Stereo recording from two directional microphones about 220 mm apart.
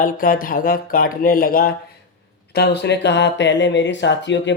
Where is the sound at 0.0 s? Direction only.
40° left (ahead or behind).